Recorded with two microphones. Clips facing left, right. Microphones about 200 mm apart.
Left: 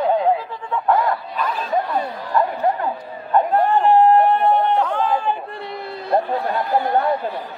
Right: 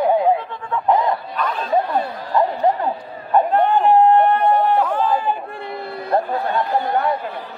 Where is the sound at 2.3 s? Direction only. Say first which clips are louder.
Right 2 dB; 20° right (ahead or behind).